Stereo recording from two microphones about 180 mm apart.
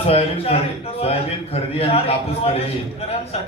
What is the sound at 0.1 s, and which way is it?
Speech, 35° left (ahead or behind).